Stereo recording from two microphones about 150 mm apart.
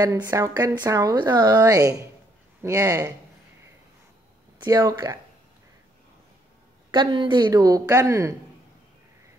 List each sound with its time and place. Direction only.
0.0 s a woman's voice: 25° right (ahead or behind)
4.6 s a woman's voice: 25° right (ahead or behind)
6.9 s a woman's voice: 30° right (ahead or behind)